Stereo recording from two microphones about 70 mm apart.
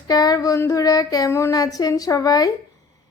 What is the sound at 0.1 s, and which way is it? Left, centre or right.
Speech, left.